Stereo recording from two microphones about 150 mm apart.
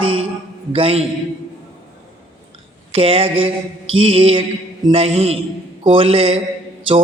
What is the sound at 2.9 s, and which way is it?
A man's voice, 40° right (ahead or behind).